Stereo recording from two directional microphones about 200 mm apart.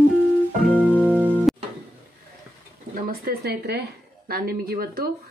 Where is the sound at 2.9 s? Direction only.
45° right (ahead or behind).